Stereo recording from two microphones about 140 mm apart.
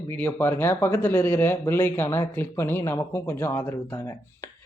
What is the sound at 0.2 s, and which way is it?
Speech, 15° left (ahead or behind).